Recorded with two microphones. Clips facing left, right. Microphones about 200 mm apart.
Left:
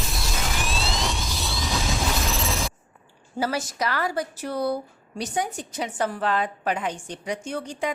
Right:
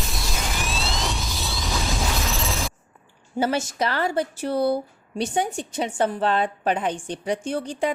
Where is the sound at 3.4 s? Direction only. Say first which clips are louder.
Right 3 dB; 25° right (ahead or behind).